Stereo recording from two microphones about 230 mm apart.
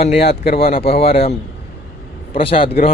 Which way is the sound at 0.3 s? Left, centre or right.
Left.